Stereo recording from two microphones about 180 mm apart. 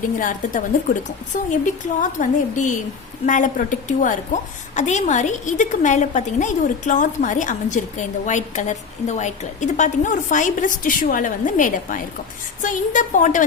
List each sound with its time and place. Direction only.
0.2 s a woman's voice: 50° left (ahead or behind)